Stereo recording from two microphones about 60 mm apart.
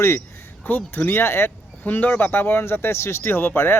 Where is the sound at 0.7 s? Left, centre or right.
Left.